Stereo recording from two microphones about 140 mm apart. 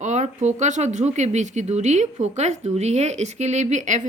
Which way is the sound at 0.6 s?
55° right (ahead or behind).